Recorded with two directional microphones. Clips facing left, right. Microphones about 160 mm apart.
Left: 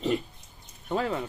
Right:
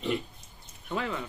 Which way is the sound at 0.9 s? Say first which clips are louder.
Left 4 dB; 35° left (ahead or behind).